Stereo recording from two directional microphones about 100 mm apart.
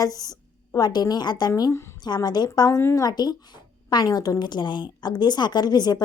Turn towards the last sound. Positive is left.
turn(degrees=45)  # may be behind; listen again after turning